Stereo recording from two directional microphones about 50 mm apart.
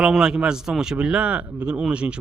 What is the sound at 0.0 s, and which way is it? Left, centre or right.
Speech, centre.